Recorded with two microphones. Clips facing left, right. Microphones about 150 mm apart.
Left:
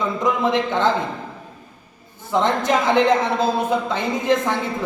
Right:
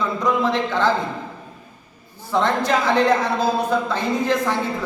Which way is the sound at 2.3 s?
20° left (ahead or behind).